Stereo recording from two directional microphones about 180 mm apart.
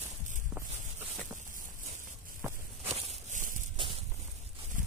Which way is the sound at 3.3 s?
45° right (ahead or behind).